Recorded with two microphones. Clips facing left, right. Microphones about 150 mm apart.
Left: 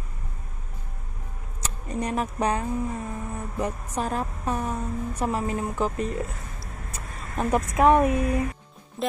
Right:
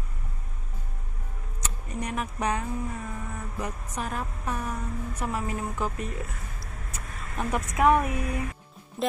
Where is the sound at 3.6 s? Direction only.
35° left (ahead or behind).